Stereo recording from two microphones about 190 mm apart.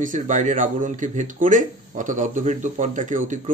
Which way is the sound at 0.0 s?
40° right (ahead or behind).